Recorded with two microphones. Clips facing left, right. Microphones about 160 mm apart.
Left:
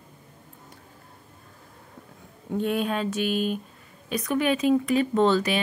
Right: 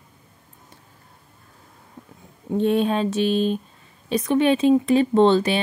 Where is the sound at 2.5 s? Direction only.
25° right (ahead or behind).